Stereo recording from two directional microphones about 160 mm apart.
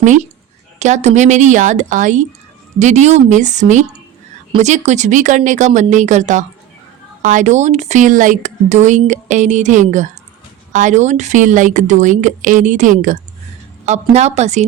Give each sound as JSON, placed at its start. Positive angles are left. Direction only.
{"t": 0.0, "sound": "speech", "side_deg": -50}